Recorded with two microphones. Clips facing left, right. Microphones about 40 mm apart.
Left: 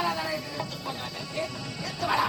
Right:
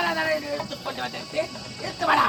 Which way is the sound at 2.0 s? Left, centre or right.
Right.